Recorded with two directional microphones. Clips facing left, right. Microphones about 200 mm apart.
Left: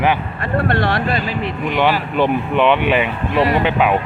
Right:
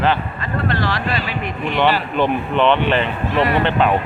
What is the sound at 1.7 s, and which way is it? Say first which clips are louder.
Speech: even; 10° left (ahead or behind).